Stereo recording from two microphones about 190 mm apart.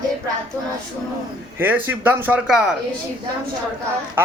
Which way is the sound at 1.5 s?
10° right (ahead or behind).